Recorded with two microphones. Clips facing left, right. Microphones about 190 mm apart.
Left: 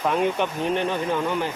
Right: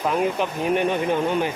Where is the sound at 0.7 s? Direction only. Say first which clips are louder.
Right 5 dB; 15° right (ahead or behind).